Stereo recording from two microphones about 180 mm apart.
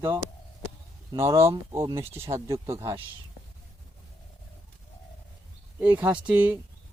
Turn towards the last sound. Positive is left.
turn(degrees=-10)  # may be behind; listen again after turning